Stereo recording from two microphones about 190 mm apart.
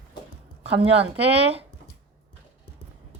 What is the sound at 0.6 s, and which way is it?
Speech, 30° right (ahead or behind).